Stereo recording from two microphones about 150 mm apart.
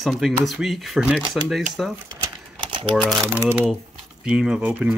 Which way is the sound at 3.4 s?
15° right (ahead or behind).